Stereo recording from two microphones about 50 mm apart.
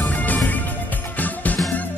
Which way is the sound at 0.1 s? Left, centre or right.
Left.